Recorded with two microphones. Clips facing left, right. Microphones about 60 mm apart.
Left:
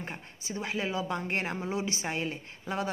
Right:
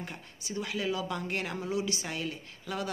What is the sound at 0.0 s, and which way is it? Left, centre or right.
Speech, left.